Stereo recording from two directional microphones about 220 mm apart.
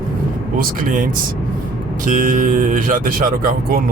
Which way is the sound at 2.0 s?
35° right (ahead or behind).